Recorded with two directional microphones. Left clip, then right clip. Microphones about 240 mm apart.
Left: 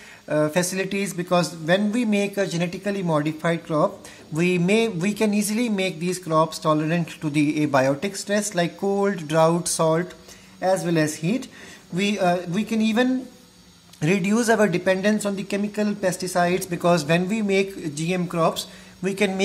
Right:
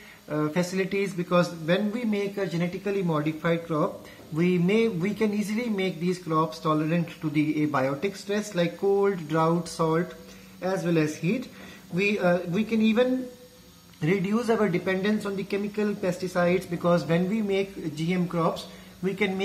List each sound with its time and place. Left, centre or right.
0.3 s speech: left
14.0 s speech: left